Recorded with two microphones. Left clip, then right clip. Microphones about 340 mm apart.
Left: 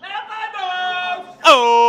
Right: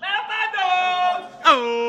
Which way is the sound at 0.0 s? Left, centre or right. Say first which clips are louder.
Right 4 dB; right.